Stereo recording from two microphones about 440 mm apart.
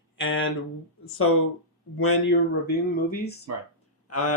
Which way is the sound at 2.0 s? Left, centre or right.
Left.